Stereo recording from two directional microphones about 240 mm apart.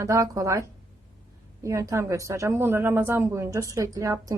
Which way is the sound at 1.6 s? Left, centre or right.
Centre.